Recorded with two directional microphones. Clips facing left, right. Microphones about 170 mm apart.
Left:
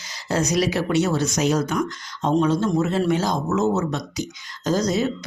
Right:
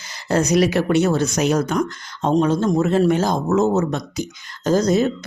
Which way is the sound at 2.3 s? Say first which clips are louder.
Right 2 dB; 50° right (ahead or behind).